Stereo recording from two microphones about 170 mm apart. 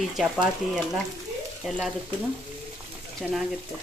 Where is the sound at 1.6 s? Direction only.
Centre (ahead or behind).